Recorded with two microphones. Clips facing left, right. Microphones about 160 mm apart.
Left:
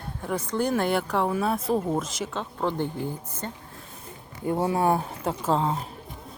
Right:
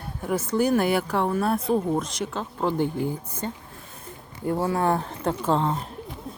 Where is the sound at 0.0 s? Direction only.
5° right (ahead or behind).